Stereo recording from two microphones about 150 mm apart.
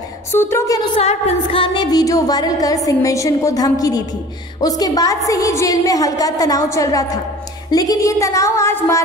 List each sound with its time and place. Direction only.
0.3 s a woman's voice: 15° left (ahead or behind)
0.9 s music: 35° left (ahead or behind); by 9.0 s 15° left (ahead or behind)